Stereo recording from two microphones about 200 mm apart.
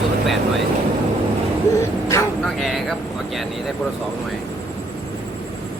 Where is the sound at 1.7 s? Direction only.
15° left (ahead or behind).